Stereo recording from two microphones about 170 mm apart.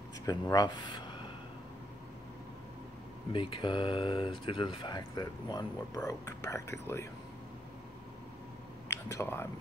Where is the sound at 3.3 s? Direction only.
30° left (ahead or behind).